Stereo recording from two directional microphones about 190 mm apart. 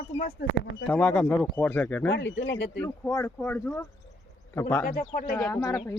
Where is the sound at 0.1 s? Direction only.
90° left.